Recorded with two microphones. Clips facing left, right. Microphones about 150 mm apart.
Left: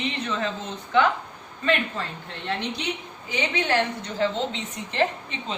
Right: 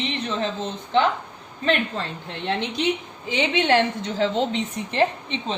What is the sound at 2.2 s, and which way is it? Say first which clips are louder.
A woman's voice: right 4 dB; 20° right (ahead or behind).